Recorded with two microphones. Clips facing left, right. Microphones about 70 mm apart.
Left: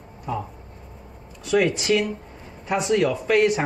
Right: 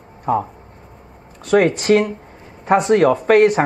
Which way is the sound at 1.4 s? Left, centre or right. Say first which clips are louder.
Right 6 dB; right.